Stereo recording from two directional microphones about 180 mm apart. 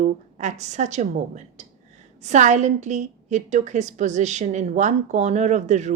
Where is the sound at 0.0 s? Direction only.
40° right (ahead or behind).